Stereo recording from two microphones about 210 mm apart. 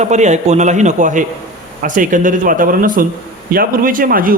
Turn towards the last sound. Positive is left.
turn(degrees=-40)  # may be behind; listen again after turning